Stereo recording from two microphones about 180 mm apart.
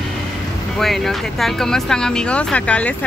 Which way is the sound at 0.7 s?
Centre (ahead or behind).